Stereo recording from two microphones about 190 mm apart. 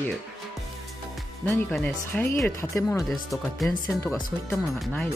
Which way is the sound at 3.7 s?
15° left (ahead or behind).